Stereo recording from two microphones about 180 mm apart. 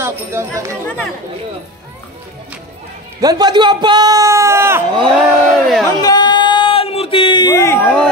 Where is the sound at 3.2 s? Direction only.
20° right (ahead or behind).